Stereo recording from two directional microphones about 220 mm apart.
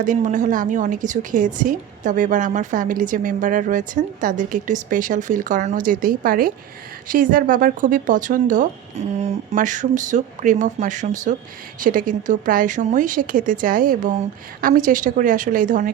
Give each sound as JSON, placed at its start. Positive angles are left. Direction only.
{"t": 0.0, "sound": "a woman's voice", "side_deg": -35}